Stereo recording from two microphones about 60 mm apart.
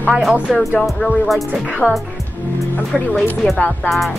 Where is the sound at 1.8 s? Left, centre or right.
Centre.